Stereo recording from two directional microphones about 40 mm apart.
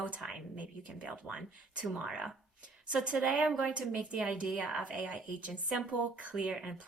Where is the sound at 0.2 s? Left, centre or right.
Centre.